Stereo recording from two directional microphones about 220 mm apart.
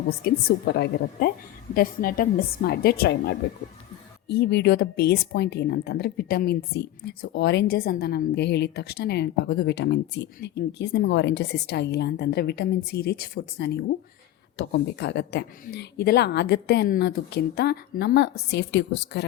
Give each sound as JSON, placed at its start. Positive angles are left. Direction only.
{"t": 0.1, "sound": "a woman's voice", "side_deg": 45}